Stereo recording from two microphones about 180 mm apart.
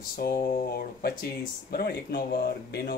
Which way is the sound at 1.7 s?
55° left (ahead or behind).